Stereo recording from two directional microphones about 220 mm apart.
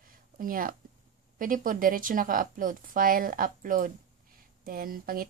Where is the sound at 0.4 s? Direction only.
40° right (ahead or behind).